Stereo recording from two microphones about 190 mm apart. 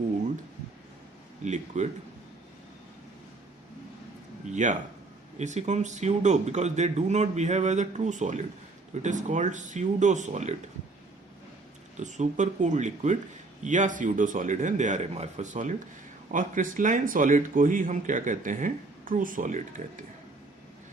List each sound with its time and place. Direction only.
1.5 s a man's voice: 40° right (ahead or behind)
4.5 s a man's voice: 40° right (ahead or behind)
11.9 s a man's voice: 40° right (ahead or behind)